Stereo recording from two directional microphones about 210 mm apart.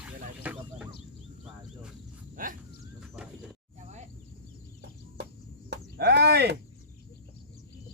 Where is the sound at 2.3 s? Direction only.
40° right (ahead or behind).